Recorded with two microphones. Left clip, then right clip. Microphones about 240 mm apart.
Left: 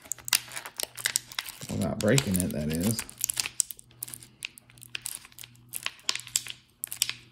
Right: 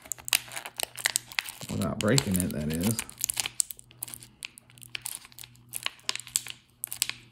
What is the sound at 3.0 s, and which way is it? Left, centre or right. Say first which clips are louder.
Crunch: even; right.